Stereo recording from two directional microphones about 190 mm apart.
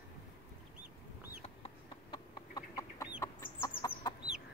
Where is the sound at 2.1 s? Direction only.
20° left (ahead or behind).